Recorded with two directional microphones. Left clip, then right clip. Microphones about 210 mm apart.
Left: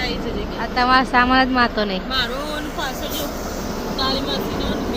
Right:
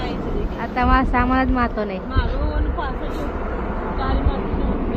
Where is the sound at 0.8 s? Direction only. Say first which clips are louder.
Left 3 dB; 15° left (ahead or behind).